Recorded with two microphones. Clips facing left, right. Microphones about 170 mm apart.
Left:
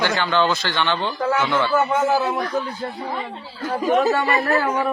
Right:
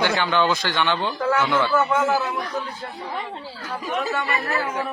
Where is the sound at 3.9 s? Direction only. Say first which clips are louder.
Left 7 dB; 40° left (ahead or behind).